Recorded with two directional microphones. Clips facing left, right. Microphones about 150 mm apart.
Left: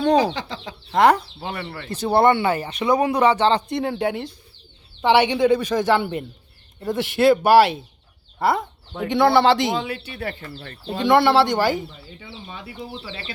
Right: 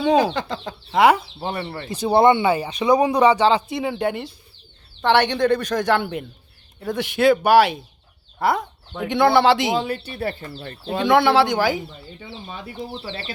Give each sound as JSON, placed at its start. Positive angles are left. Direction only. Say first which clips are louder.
{"t": 0.3, "sound": "speech", "louder": "right 4 dB", "side_deg": -50}
{"t": 0.9, "sound": "speech", "louder": "even", "side_deg": -5}
{"t": 1.4, "sound": "speech", "louder": "right 3 dB", "side_deg": -30}
{"t": 1.9, "sound": "speech", "louder": "right 1 dB", "side_deg": -15}
{"t": 9.7, "sound": "speech", "louder": "right 3 dB", "side_deg": -35}
{"t": 11.0, "sound": "speech", "louder": "even", "side_deg": 0}
{"t": 11.9, "sound": "speech", "louder": "right 3 dB", "side_deg": -40}